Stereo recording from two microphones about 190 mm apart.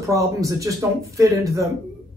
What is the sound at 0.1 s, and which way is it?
A man's voice, 15° right (ahead or behind).